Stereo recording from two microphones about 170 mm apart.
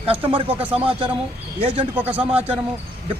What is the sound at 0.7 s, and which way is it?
Speech, 30° right (ahead or behind).